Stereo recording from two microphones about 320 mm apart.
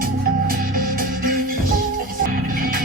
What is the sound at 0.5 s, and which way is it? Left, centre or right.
Music, right.